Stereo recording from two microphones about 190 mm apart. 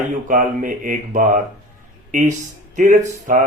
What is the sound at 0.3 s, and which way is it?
Speech, 45° right (ahead or behind).